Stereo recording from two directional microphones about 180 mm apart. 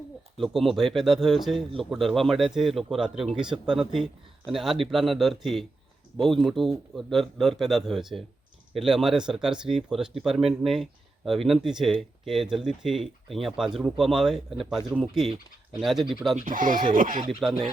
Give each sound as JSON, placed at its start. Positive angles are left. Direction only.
{"t": 0.3, "sound": "speech", "side_deg": 0}
{"t": 16.4, "sound": "speech", "side_deg": -50}